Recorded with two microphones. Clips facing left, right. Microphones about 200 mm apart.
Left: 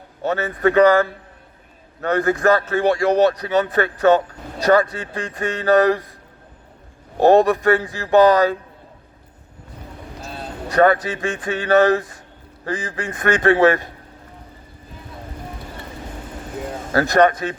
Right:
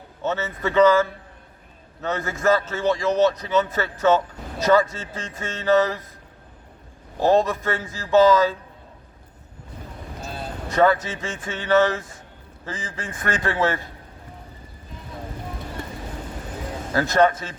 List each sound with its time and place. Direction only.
0.2 s speech: 60° left (ahead or behind)
7.2 s speech: 60° left (ahead or behind)
10.7 s speech: 65° left (ahead or behind)
16.9 s speech: 65° left (ahead or behind)